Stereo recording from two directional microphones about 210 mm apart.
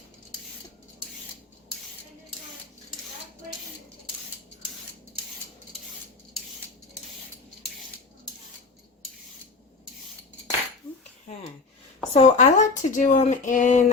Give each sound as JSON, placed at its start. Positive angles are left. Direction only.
{"t": 12.1, "sound": "speech", "side_deg": 30}